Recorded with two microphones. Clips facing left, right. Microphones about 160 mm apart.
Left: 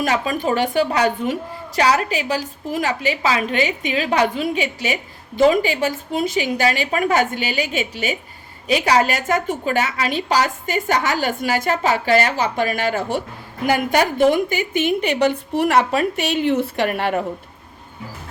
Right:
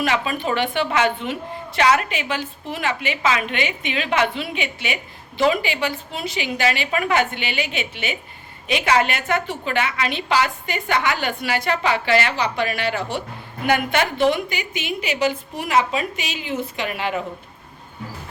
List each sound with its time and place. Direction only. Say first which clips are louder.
0.0 s a woman's voice: left 2 dB; 40° left (ahead or behind)
13.7 s a woman's voice: left 2 dB; 35° left (ahead or behind); by 17.2 s 55° left (ahead or behind)